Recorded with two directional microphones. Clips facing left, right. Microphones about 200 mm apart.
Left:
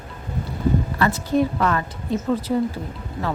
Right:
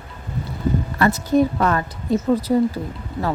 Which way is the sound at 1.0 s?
40° right (ahead or behind).